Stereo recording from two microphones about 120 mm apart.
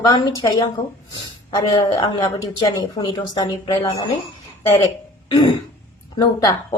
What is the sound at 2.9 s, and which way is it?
A woman's voice, 35° left (ahead or behind).